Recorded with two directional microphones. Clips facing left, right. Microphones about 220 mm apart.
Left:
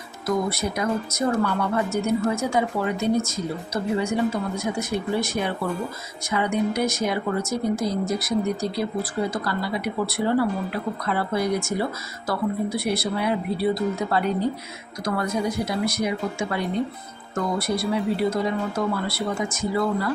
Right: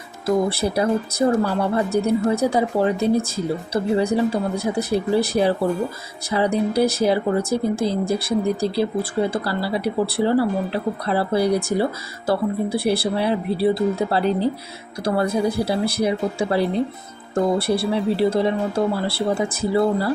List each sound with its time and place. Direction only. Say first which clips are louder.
0.3 s speech: right 5 dB; 30° right (ahead or behind)